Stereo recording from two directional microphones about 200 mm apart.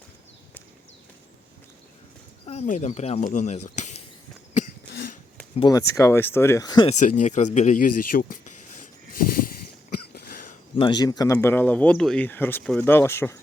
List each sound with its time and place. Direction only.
2.5 s speech: 35° left (ahead or behind)
5.5 s speech: 20° left (ahead or behind)
7.0 s a sound: 40° left (ahead or behind)
10.8 s speech: 25° left (ahead or behind)